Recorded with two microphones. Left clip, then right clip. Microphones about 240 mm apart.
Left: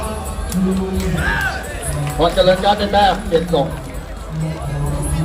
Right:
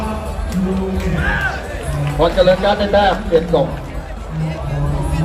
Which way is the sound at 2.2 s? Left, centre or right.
Left.